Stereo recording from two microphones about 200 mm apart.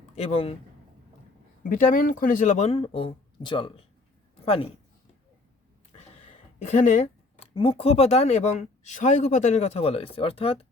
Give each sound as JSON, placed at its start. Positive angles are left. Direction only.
{"t": 0.2, "sound": "speech", "side_deg": 30}
{"t": 1.7, "sound": "speech", "side_deg": 45}
{"t": 5.9, "sound": "speech", "side_deg": 30}